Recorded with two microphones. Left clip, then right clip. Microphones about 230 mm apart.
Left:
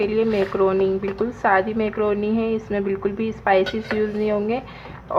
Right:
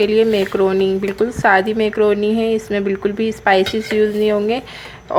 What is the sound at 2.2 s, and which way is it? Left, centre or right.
Speech, centre.